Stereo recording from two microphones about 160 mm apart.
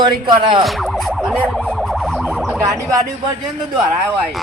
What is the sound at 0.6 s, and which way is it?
Music, centre (ahead or behind).